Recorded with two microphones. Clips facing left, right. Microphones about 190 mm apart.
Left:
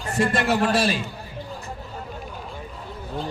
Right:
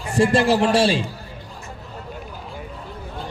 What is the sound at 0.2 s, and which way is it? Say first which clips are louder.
Speech: right 5 dB; 30° right (ahead or behind).